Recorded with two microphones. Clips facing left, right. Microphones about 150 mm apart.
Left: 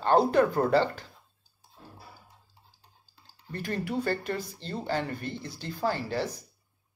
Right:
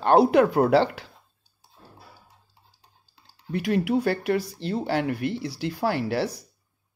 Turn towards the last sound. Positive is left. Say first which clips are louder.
# right 5 dB
turn(degrees=-70)  # may be behind; listen again after turning